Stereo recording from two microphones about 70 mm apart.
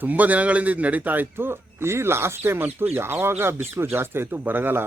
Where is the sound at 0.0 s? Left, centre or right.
Right.